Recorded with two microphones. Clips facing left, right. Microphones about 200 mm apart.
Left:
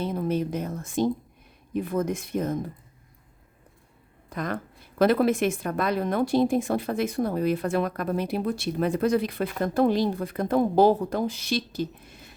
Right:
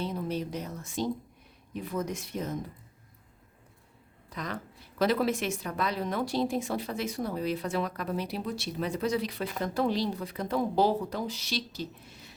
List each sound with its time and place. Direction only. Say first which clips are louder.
0.0 s a woman's voice: left 6 dB; 50° left (ahead or behind)
4.3 s a woman's voice: left 6 dB; 55° left (ahead or behind)